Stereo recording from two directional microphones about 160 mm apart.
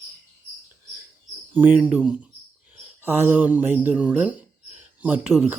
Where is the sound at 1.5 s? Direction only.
10° right (ahead or behind).